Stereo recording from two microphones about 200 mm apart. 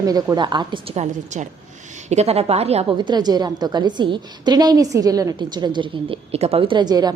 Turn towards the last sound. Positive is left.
turn(degrees=-20)  # may be behind; listen again after turning